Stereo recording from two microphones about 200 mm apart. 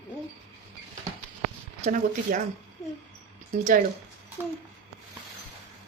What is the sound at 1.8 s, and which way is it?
Speech, 40° right (ahead or behind).